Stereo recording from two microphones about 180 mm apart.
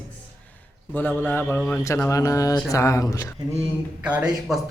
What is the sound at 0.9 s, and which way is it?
A man's voice, 10° left (ahead or behind).